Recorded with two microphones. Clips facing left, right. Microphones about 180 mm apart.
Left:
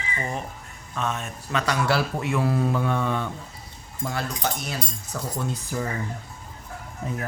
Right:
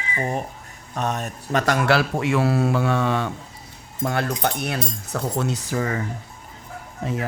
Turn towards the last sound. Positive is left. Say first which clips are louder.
# right 4 dB
turn(degrees=-90)